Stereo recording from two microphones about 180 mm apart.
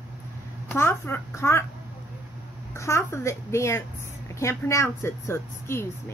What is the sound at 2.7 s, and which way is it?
A woman's voice, 15° left (ahead or behind).